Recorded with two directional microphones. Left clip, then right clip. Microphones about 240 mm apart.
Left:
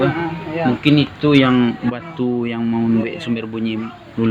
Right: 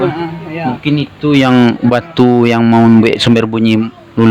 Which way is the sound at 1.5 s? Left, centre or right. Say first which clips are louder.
Right 9 dB; right.